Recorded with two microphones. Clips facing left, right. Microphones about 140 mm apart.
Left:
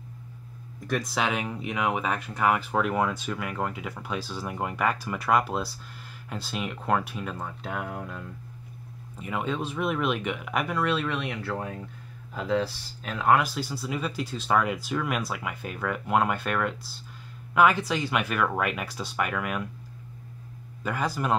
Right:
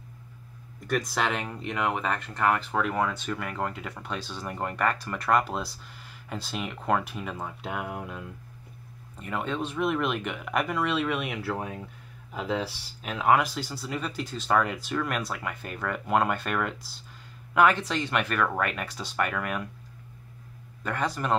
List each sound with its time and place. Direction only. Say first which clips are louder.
0.8 s speech: even; centre (ahead or behind)
9.1 s speech: left 1 dB; centre (ahead or behind)
13.0 s speech: even; 5° right (ahead or behind)
20.8 s speech: left 1 dB; 5° left (ahead or behind)